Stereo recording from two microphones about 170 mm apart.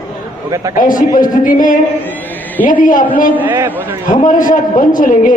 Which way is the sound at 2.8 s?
50° left (ahead or behind).